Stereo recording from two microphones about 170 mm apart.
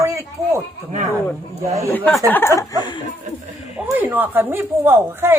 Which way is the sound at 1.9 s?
10° left (ahead or behind).